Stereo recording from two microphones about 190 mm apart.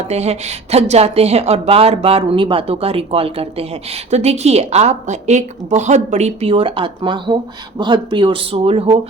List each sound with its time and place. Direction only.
0.1 s a woman's voice: 35° right (ahead or behind)